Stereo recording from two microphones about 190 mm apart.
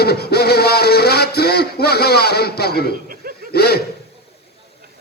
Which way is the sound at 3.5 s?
55° left (ahead or behind).